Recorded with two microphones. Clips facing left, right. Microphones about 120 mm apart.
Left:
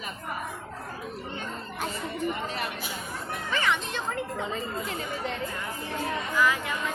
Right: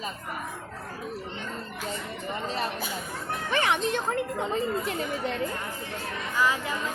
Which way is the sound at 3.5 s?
55° right (ahead or behind).